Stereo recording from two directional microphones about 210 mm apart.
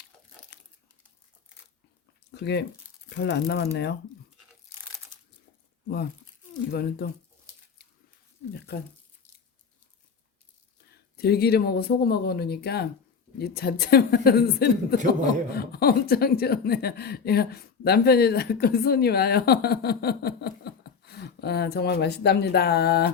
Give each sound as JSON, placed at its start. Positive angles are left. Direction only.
{"t": 0.5, "sound": "crumpling", "side_deg": 50}
{"t": 2.3, "sound": "speech", "side_deg": 50}
{"t": 6.7, "sound": "speech", "side_deg": 50}
{"t": 11.2, "sound": "speech", "side_deg": 50}